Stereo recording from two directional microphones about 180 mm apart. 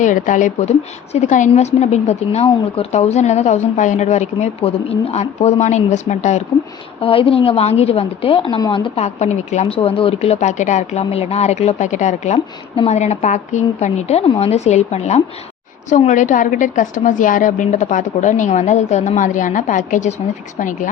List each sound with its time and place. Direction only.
0.0 s a woman's voice: 45° left (ahead or behind)